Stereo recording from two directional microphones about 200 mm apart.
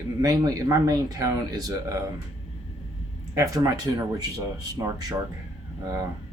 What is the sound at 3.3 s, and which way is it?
Speech, 15° right (ahead or behind).